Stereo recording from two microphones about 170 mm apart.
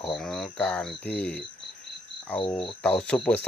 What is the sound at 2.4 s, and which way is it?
Cricket, 30° left (ahead or behind).